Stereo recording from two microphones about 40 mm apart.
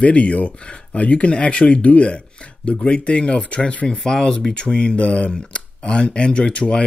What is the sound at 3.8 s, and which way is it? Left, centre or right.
Speech, centre.